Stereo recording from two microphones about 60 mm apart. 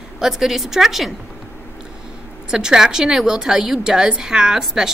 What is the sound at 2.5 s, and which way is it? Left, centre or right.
A woman's voice, centre.